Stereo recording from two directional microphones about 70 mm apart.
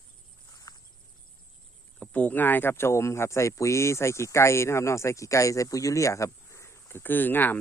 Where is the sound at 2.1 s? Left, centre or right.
Left.